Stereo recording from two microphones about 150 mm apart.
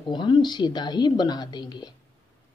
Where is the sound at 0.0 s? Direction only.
30° left (ahead or behind).